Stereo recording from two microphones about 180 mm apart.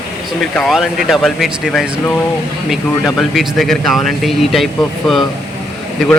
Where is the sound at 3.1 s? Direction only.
Centre (ahead or behind).